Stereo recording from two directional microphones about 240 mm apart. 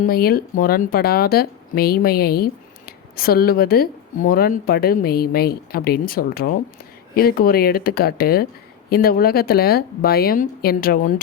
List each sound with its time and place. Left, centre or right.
0.0 s speech: left